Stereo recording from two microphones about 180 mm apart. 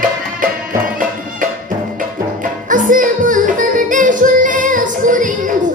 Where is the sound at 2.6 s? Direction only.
45° right (ahead or behind).